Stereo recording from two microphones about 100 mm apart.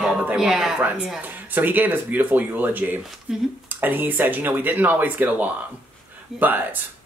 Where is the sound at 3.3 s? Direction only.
5° right (ahead or behind).